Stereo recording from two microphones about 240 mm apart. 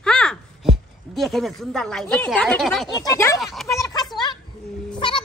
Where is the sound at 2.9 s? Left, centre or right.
Centre.